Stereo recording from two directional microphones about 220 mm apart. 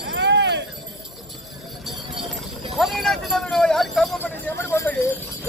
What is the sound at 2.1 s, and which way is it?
Clip-clop, centre (ahead or behind).